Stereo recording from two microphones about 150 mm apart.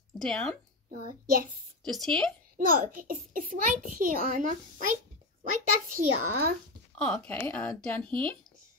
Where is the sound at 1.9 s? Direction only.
5° left (ahead or behind).